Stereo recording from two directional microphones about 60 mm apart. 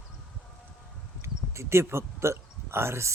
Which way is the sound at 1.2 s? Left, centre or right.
Right.